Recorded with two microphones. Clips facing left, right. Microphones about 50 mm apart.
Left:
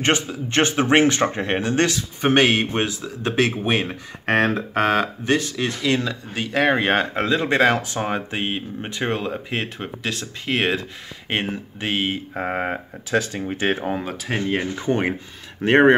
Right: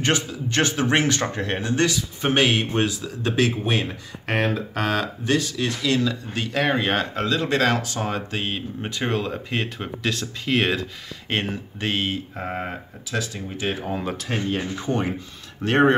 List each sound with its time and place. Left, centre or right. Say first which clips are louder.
0.0 s speech: left 2 dB; left
4.3 s a sound: left 4 dB; left
4.6 s speech: left 5 dB; left
12.4 s speech: left 5 dB; left
14.0 s speech: right 1 dB; centre
15.6 s speech: left 4 dB; left